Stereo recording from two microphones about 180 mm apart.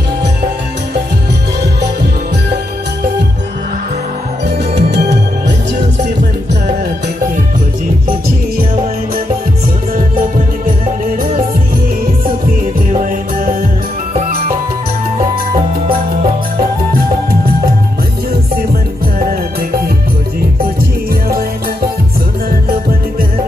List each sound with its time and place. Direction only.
1.6 s music: 65° right (ahead or behind)
4.7 s music: 70° right (ahead or behind)
19.1 s music: 50° right (ahead or behind)